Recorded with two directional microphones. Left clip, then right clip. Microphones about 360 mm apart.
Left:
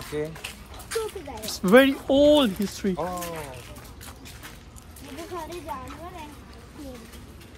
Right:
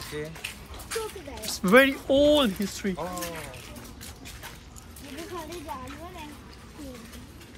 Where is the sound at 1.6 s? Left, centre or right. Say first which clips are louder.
Left 2 dB; centre.